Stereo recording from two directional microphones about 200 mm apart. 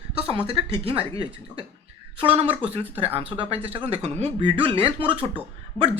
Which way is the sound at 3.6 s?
30° right (ahead or behind).